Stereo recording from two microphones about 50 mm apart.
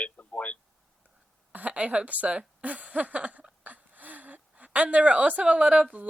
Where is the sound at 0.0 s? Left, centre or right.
Left.